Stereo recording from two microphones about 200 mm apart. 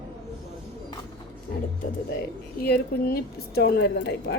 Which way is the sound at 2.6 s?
50° left (ahead or behind).